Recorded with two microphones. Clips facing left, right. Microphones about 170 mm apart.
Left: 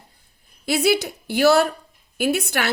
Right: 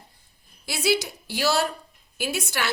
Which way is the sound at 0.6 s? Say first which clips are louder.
Left 5 dB; 60° left (ahead or behind).